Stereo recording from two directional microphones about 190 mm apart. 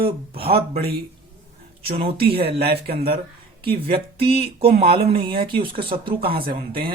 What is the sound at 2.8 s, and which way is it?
Speech, 30° right (ahead or behind).